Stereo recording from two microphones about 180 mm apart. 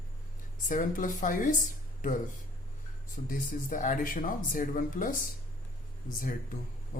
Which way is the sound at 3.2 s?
50° left (ahead or behind).